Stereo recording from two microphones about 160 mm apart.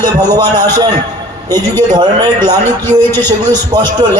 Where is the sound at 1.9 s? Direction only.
25° right (ahead or behind).